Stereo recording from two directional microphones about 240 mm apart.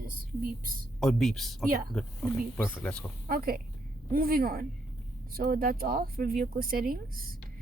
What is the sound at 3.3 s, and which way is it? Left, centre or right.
Speech, right.